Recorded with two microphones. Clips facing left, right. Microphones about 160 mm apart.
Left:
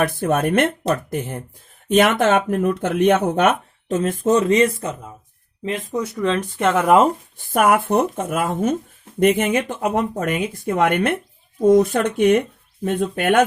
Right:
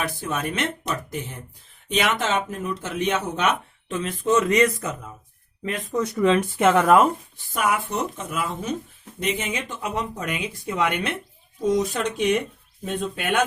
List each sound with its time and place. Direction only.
0.2 s speech: 55° left (ahead or behind); by 6.0 s 20° left (ahead or behind)
6.1 s speech: 10° right (ahead or behind)
6.8 s speech: 20° left (ahead or behind)
7.3 s speech: 55° left (ahead or behind)